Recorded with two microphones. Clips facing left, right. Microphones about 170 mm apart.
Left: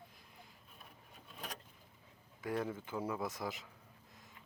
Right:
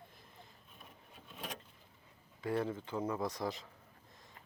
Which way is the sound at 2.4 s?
10° left (ahead or behind).